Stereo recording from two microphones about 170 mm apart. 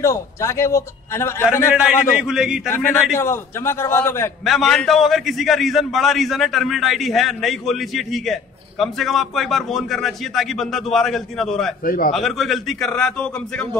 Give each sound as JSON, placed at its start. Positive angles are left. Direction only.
{"t": 0.0, "sound": "a man's voice", "side_deg": 20}
{"t": 1.9, "sound": "a man's voice", "side_deg": -5}
{"t": 2.7, "sound": "a man's voice", "side_deg": 15}
{"t": 4.5, "sound": "a man's voice", "side_deg": 0}
{"t": 11.8, "sound": "a man's voice", "side_deg": 60}
{"t": 12.1, "sound": "a man's voice", "side_deg": 0}